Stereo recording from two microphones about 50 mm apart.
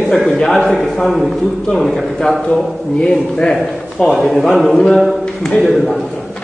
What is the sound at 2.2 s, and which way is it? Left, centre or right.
A man's voice, centre.